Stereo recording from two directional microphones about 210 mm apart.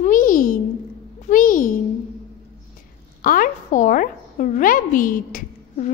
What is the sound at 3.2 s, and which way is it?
A woman's voice, 40° left (ahead or behind).